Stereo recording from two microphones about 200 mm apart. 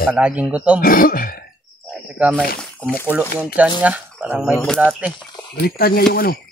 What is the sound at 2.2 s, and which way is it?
Speech, 5° right (ahead or behind).